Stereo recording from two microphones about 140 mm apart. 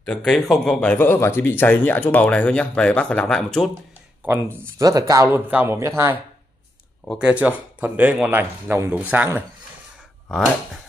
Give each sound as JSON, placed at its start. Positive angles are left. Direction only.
{"t": 0.0, "sound": "speech", "side_deg": 5}
{"t": 4.2, "sound": "speech", "side_deg": -15}
{"t": 5.5, "sound": "speech", "side_deg": -15}
{"t": 10.2, "sound": "speech", "side_deg": 5}